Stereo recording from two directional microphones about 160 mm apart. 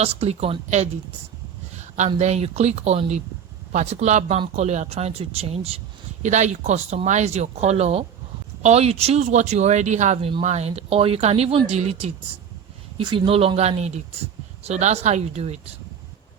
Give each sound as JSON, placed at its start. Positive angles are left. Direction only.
{"t": 0.0, "sound": "speech", "side_deg": -40}
{"t": 6.2, "sound": "speech", "side_deg": -50}
{"t": 13.0, "sound": "speech", "side_deg": -30}